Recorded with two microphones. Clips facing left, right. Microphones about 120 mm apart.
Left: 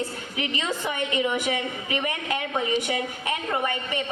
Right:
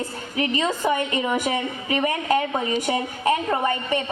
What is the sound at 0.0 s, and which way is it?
A woman's voice, 40° right (ahead or behind).